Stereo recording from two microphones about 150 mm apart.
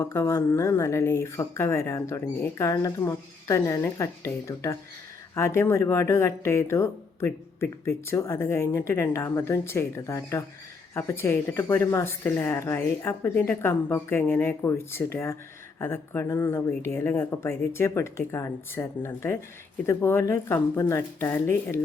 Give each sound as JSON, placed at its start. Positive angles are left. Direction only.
{"t": 0.0, "sound": "speech", "side_deg": 20}